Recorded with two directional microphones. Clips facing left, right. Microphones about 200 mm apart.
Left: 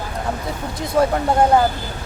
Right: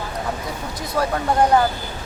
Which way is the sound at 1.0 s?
25° left (ahead or behind).